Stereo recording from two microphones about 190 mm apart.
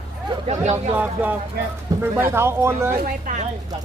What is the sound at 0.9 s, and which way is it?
Speech, 10° right (ahead or behind).